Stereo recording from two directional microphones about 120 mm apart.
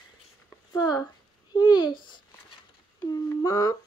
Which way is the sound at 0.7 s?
35° left (ahead or behind).